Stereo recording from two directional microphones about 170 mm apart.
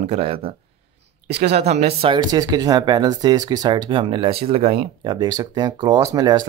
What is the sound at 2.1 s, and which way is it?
Speech, 20° right (ahead or behind).